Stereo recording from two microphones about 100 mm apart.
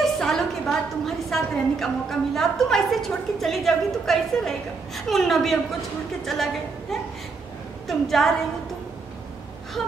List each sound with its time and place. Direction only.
0.0 s a woman's voice: 5° left (ahead or behind)
9.8 s a woman's voice: centre (ahead or behind)